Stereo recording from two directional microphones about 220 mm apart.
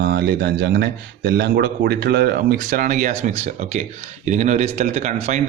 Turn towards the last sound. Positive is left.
turn(degrees=-30)  # may be behind; listen again after turning